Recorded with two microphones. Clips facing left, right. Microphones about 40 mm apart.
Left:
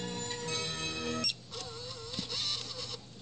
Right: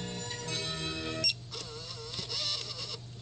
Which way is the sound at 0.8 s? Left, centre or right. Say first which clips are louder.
Even; right.